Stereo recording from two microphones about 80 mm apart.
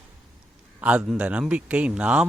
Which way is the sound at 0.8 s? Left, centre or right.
Centre.